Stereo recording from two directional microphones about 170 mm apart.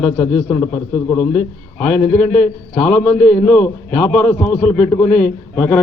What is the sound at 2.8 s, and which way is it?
A man's voice, 10° left (ahead or behind).